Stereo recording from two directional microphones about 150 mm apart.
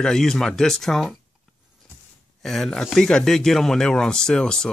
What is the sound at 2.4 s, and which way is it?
Speech, centre (ahead or behind).